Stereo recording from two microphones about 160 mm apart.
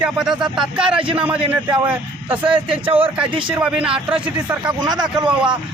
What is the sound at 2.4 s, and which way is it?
Speech, 35° right (ahead or behind).